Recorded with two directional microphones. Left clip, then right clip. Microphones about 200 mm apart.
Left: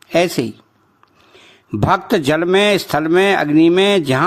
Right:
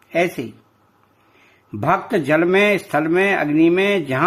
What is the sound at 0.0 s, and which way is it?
Speech, 30° left (ahead or behind).